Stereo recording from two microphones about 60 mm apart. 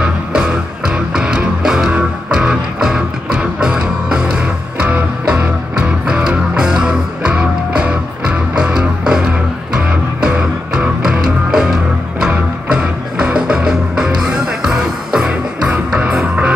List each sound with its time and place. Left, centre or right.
0.0 s music: centre